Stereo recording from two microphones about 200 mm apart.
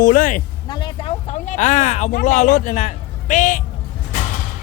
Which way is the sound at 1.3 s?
40° left (ahead or behind).